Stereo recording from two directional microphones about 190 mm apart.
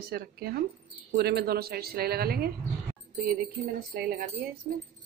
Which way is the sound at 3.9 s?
50° right (ahead or behind).